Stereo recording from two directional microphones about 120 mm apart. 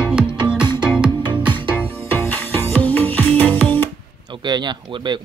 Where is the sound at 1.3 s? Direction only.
40° right (ahead or behind).